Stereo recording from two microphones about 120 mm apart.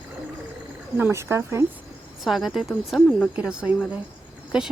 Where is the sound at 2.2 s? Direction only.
Centre (ahead or behind).